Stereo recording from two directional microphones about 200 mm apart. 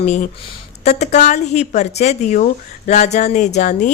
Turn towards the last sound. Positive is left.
turn(degrees=35)  # may be behind; listen again after turning